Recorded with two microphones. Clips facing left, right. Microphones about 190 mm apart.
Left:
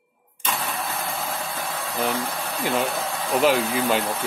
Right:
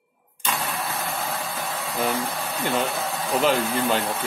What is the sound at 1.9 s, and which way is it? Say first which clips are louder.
Speech: even; centre (ahead or behind).